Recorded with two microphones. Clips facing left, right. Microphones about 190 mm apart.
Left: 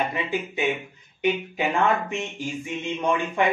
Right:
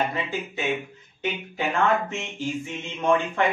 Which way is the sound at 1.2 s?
15° left (ahead or behind).